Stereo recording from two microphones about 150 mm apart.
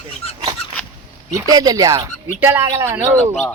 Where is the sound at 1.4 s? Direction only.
25° right (ahead or behind).